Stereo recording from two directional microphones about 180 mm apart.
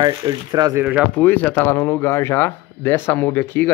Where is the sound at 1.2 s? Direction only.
10° left (ahead or behind).